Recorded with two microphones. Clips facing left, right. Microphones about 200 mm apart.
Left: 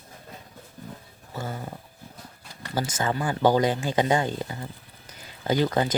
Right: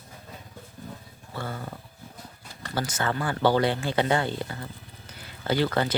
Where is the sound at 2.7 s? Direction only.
15° left (ahead or behind).